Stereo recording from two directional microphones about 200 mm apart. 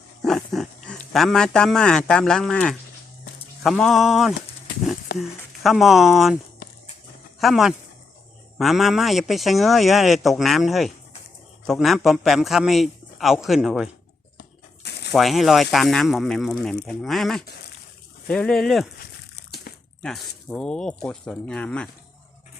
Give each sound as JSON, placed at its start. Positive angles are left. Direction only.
{"t": 0.2, "sound": "wild animals", "side_deg": 0}
{"t": 1.1, "sound": "a man's voice", "side_deg": 0}
{"t": 7.3, "sound": "a man's voice", "side_deg": 0}
{"t": 14.8, "sound": "a sound", "side_deg": 55}
{"t": 15.1, "sound": "a man's voice", "side_deg": 0}
{"t": 19.5, "sound": "a sound", "side_deg": 50}
{"t": 20.0, "sound": "a man's voice", "side_deg": 5}